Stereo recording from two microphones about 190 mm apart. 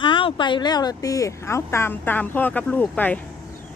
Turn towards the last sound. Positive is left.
turn(degrees=10)  # may be behind; listen again after turning